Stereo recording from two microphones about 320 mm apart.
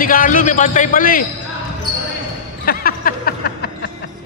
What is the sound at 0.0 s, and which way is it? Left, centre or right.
A man's voice, left.